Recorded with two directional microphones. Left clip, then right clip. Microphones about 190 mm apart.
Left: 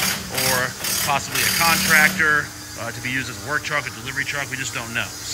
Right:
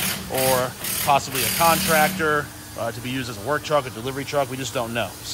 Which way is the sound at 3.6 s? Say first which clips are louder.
Right 2 dB; 20° right (ahead or behind).